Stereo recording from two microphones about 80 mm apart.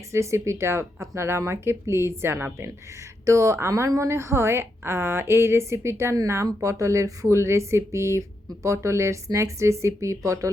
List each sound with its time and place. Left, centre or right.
0.1 s a woman's voice: right